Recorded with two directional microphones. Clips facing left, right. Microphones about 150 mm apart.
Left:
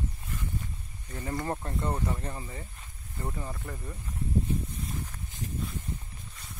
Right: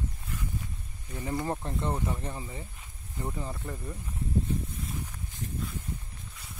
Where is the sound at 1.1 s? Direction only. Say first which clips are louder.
Right 1 dB; 15° right (ahead or behind).